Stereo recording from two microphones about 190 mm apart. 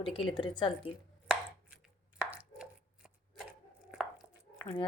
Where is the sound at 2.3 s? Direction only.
5° right (ahead or behind).